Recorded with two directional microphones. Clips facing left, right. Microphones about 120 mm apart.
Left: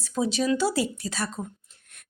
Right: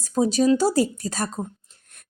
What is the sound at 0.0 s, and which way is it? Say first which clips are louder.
A woman's voice: right 6 dB; 40° right (ahead or behind).